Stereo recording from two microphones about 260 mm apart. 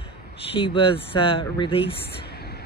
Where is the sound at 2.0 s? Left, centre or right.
Left.